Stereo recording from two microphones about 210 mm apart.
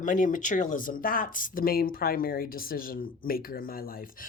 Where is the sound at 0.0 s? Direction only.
40° left (ahead or behind).